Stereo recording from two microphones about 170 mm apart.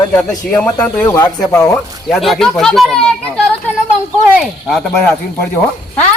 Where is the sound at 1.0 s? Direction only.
20° left (ahead or behind).